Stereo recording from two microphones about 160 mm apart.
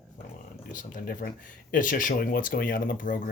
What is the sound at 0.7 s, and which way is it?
Speech, 55° left (ahead or behind).